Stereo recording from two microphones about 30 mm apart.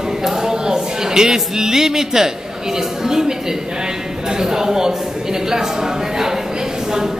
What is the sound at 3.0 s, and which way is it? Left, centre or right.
Speech, centre.